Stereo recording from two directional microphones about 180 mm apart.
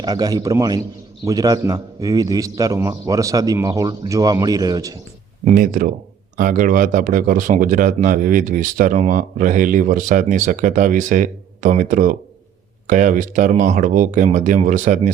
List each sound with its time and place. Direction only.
0.0 s a man's voice: 20° right (ahead or behind)
5.5 s speech: 50° right (ahead or behind)